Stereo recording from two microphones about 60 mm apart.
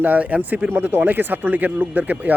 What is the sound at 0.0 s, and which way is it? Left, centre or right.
Speech, right.